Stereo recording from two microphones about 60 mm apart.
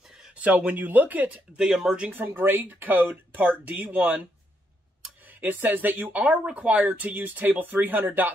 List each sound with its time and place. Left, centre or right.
0.3 s speech: right
1.6 s speech: centre
2.1 s speech: right
5.2 s speech: right